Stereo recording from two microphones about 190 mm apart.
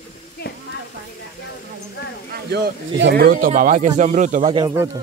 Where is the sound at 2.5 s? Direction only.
60° right (ahead or behind); by 4.6 s 40° right (ahead or behind).